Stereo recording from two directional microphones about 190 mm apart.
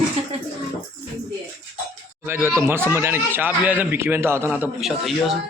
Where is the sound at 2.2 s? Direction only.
10° right (ahead or behind).